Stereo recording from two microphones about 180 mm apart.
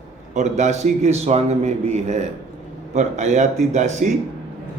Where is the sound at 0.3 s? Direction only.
40° right (ahead or behind).